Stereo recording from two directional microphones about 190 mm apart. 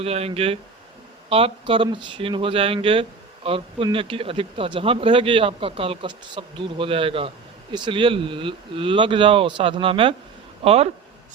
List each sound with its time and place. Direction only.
0.0 s speech: 30° right (ahead or behind)